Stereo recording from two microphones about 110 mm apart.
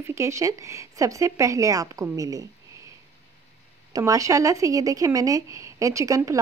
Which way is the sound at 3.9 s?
30° right (ahead or behind).